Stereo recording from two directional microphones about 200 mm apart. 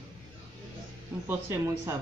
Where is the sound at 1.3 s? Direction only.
10° right (ahead or behind).